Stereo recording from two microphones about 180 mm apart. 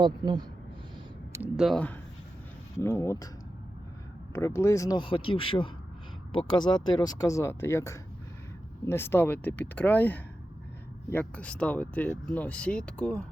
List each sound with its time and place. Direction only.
0.0 s speech: 25° right (ahead or behind)
1.3 s speech: 5° right (ahead or behind); by 3.2 s 20° left (ahead or behind)
4.3 s speech: 15° left (ahead or behind)